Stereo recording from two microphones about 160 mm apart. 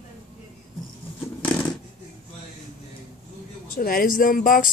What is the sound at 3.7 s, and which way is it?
Speech, 65° left (ahead or behind).